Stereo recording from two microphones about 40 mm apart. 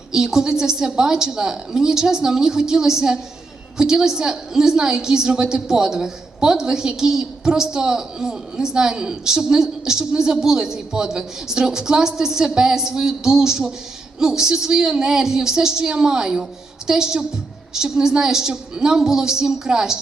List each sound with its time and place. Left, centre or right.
0.1 s a woman's voice: centre